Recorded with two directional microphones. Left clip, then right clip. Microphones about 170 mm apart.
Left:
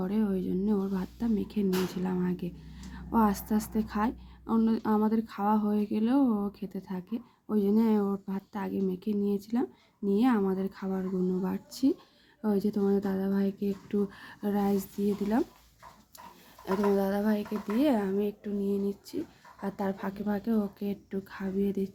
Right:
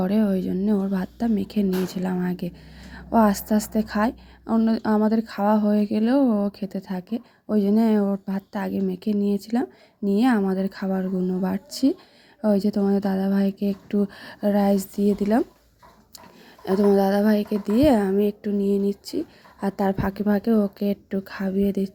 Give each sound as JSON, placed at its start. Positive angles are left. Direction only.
{"t": 0.0, "sound": "a woman's voice", "side_deg": -35}
{"t": 16.6, "sound": "speech", "side_deg": -30}